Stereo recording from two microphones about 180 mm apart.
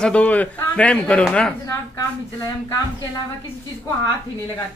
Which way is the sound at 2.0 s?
20° left (ahead or behind).